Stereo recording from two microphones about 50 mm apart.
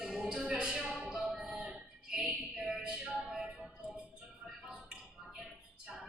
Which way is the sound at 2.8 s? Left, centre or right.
Centre.